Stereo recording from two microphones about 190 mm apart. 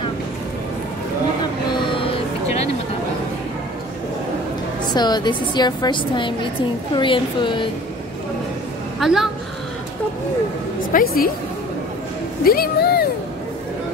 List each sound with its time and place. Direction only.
1.7 s vehicle: 30° left (ahead or behind)
4.9 s a woman's voice: 20° left (ahead or behind)
9.0 s a woman's voice: centre (ahead or behind)
10.9 s speech: 45° left (ahead or behind)
12.4 s speech: 55° left (ahead or behind)